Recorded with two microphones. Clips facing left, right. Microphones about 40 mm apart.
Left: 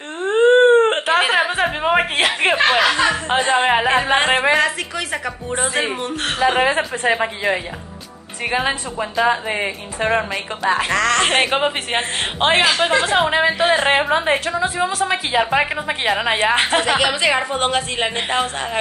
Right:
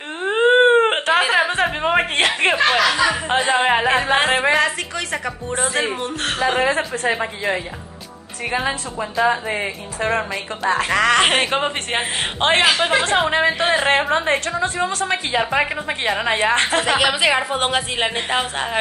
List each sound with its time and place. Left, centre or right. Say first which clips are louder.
0.2 s dog: left 2 dB; centre
1.2 s speech: even; centre
2.8 s speech: left 1 dB; left
3.1 s a woman's voice: left 1 dB; centre
7.1 s speech: left 4 dB; centre
8.5 s speech: left 2 dB; left
10.9 s speech: right 5 dB; centre
11.4 s a woman's voice: left 2 dB; centre
16.8 s a woman's voice: even; centre